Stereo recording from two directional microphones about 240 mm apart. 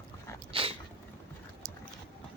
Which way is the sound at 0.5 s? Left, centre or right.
Right.